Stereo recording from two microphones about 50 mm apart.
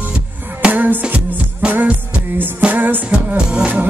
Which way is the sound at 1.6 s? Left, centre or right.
Centre.